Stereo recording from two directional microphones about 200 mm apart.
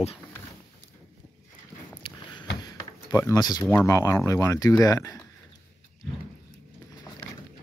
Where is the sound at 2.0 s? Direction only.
20° left (ahead or behind).